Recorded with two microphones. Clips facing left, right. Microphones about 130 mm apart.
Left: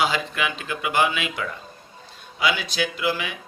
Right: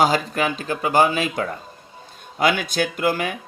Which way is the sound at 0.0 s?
40° right (ahead or behind).